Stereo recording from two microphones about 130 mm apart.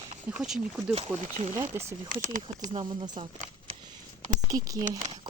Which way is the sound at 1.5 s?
20° right (ahead or behind).